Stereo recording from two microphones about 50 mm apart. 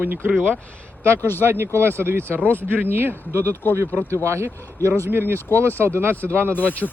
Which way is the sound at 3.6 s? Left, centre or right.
Left.